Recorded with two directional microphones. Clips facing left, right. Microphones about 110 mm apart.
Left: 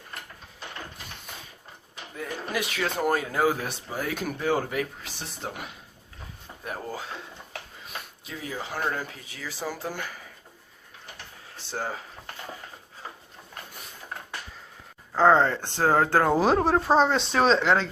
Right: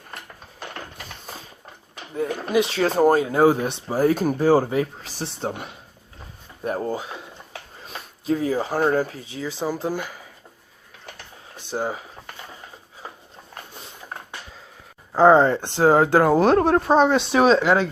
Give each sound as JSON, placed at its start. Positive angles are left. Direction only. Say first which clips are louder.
{"t": 1.3, "sound": "a sound", "louder": "right 6 dB", "side_deg": -35}
{"t": 2.1, "sound": "speech", "louder": "right 10 dB", "side_deg": -25}
{"t": 3.8, "sound": "speech", "louder": "right 13 dB", "side_deg": -35}
{"t": 6.7, "sound": "speech", "louder": "right 9 dB", "side_deg": -30}
{"t": 6.9, "sound": "speech", "louder": "right 6 dB", "side_deg": -15}
{"t": 7.8, "sound": "speech", "louder": "right 2 dB", "side_deg": -35}
{"t": 11.5, "sound": "a sound", "louder": "right 6 dB", "side_deg": -15}
{"t": 13.7, "sound": "a sound", "louder": "right 3 dB", "side_deg": -25}
{"t": 15.1, "sound": "speech", "louder": "right 5 dB", "side_deg": -15}
{"t": 16.3, "sound": "speech", "louder": "right 5 dB", "side_deg": 0}